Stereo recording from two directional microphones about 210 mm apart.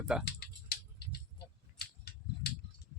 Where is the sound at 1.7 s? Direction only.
50° left (ahead or behind).